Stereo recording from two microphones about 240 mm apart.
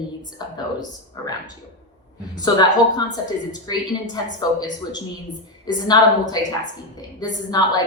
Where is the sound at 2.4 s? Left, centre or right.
Centre.